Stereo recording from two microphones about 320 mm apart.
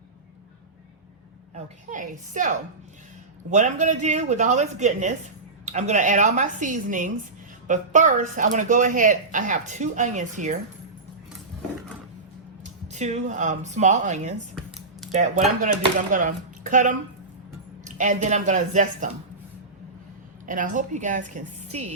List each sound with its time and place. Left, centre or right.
1.5 s speech: right
12.6 s speech: right
20.5 s speech: right